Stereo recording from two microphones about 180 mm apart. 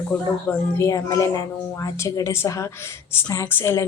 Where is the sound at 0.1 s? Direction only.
10° left (ahead or behind).